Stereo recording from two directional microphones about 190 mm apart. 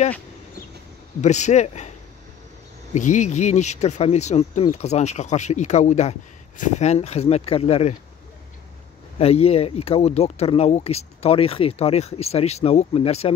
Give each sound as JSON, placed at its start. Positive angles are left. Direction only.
{"t": 1.2, "sound": "speech", "side_deg": 35}
{"t": 2.9, "sound": "speech", "side_deg": 40}
{"t": 9.2, "sound": "speech", "side_deg": 30}